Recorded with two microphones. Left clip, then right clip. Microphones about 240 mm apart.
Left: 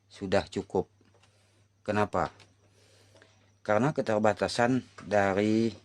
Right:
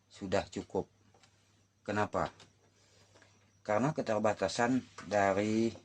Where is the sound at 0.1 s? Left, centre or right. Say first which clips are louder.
Left 6 dB; left.